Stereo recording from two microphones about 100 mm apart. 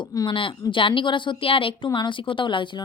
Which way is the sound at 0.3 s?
60° left (ahead or behind).